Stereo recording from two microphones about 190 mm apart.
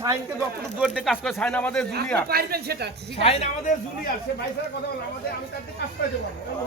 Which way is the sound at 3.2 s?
30° left (ahead or behind).